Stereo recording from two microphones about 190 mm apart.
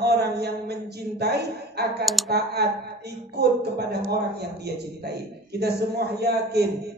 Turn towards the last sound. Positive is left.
turn(degrees=-55)  # may be behind; listen again after turning